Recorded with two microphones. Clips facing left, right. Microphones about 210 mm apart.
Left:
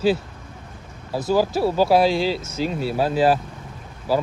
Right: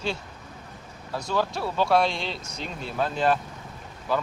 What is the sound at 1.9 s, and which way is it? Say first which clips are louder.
Speech: left 6 dB; 5° left (ahead or behind).